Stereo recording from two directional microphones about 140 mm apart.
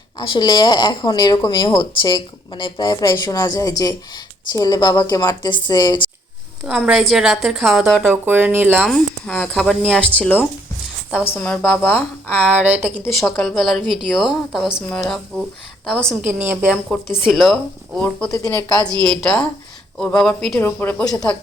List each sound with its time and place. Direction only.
0.2 s a woman's voice: 30° left (ahead or behind)
6.7 s a woman's voice: 5° right (ahead or behind)
8.0 s speech: 15° right (ahead or behind)
8.8 s speech: 5° left (ahead or behind)
13.1 s a woman's voice: centre (ahead or behind)
16.4 s speech: 15° right (ahead or behind)
17.2 s a woman's voice: centre (ahead or behind)
18.3 s a woman's voice: 25° left (ahead or behind)
19.1 s a woman's voice: 5° left (ahead or behind)
20.6 s speech: 15° left (ahead or behind)